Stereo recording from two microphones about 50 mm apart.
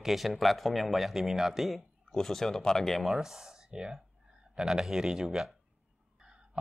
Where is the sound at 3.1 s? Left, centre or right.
Centre.